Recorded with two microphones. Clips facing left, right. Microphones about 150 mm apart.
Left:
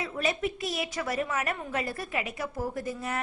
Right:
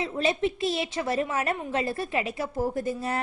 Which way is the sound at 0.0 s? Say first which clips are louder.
Right 4 dB; 25° right (ahead or behind).